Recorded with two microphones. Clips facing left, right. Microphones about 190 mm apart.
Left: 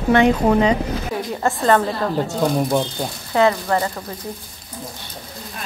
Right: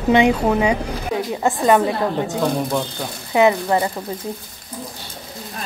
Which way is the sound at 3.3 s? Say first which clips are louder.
Right 2 dB; 15° right (ahead or behind).